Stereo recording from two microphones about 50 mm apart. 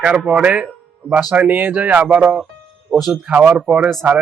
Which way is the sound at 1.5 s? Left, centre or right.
Right.